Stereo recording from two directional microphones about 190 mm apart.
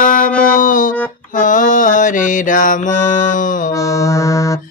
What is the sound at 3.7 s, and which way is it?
Music, 15° left (ahead or behind).